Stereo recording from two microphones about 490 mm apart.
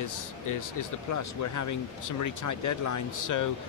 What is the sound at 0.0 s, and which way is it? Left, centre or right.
Speech, left.